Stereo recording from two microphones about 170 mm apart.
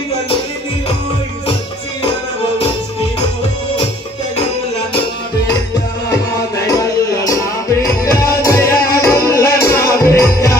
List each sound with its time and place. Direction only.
6.7 s music: 20° left (ahead or behind)